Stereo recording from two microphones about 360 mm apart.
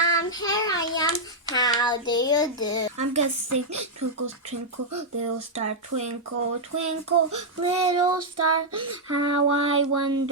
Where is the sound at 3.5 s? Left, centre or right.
Right.